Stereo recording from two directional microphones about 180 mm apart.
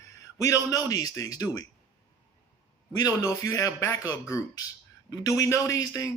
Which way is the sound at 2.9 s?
15° left (ahead or behind).